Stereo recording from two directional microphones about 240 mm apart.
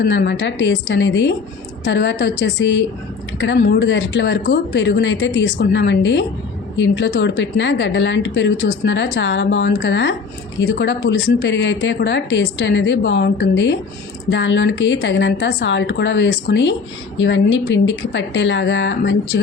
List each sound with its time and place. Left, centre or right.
0.0 s speech: left